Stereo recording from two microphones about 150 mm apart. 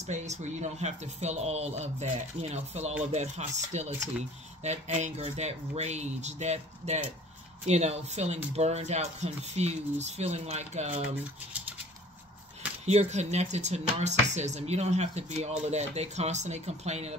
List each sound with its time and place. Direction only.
0.0 s speech: 50° right (ahead or behind)
12.8 s speech: 45° right (ahead or behind)